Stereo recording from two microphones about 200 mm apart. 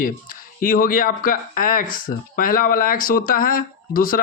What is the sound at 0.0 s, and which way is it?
Speech, 45° left (ahead or behind).